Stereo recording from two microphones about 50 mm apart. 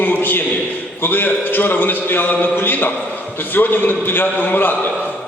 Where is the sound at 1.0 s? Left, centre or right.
Left.